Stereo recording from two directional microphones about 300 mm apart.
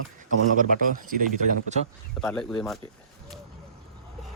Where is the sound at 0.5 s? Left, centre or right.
Right.